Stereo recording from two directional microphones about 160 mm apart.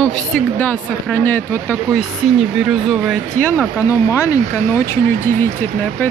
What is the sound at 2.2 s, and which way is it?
Speech, centre (ahead or behind).